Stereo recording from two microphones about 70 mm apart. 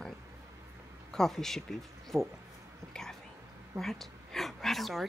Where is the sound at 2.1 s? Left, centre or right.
Right.